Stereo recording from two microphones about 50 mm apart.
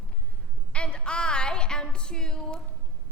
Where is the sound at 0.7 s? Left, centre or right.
Centre.